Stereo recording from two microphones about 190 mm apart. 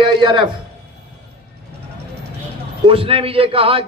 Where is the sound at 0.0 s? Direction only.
25° right (ahead or behind).